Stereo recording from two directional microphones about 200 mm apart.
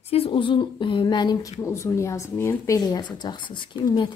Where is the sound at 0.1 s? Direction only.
25° left (ahead or behind).